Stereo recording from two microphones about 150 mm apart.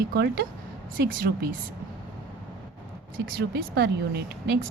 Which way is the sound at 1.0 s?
70° right (ahead or behind).